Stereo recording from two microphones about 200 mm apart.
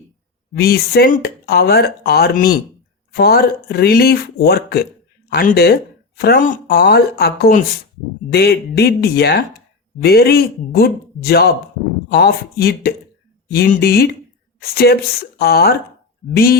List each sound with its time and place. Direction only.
0.5 s speech: 50° left (ahead or behind)